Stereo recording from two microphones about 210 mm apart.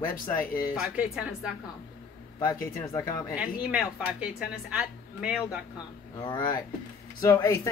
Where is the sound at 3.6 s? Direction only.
5° right (ahead or behind).